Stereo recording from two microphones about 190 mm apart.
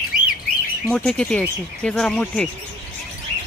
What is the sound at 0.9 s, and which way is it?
Speech, 5° left (ahead or behind).